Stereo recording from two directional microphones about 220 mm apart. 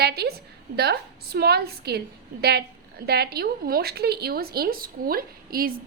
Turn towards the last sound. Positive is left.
turn(degrees=-40)  # may be behind; listen again after turning